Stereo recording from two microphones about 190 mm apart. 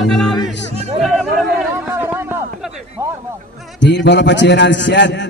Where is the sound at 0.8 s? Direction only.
35° right (ahead or behind).